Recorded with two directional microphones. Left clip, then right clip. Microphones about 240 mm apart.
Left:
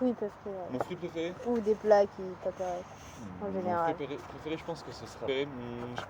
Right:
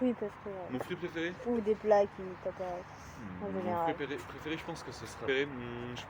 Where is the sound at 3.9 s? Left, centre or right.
Centre.